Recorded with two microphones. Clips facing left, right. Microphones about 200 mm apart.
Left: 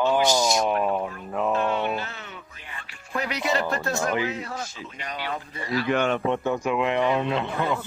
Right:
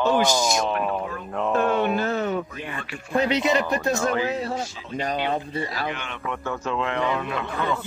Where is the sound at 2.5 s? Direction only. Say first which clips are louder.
Right 11 dB; 65° right (ahead or behind).